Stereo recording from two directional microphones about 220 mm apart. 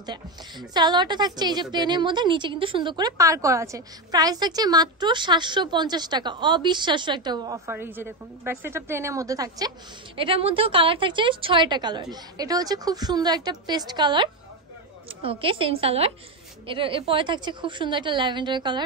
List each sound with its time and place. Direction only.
0.0 s a woman's voice: 20° right (ahead or behind)